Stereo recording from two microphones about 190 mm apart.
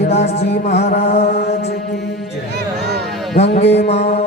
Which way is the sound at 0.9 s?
55° left (ahead or behind).